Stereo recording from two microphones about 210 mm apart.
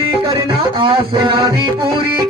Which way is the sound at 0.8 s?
25° right (ahead or behind).